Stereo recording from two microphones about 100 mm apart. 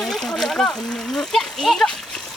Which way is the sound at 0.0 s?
5° left (ahead or behind).